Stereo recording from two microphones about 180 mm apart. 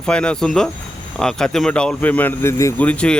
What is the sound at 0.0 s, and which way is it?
Speech, 5° left (ahead or behind).